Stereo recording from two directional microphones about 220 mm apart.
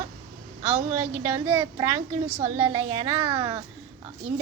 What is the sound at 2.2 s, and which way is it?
A woman's voice, 30° right (ahead or behind).